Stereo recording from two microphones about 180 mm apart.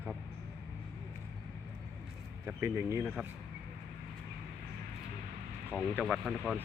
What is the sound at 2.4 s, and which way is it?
Speech, 15° right (ahead or behind).